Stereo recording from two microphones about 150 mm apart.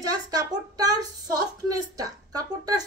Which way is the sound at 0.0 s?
25° right (ahead or behind).